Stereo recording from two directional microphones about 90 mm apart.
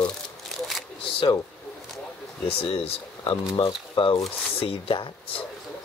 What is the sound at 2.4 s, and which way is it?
Speech, 90° left.